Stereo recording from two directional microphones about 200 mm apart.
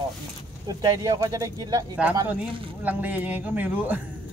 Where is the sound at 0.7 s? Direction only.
20° right (ahead or behind).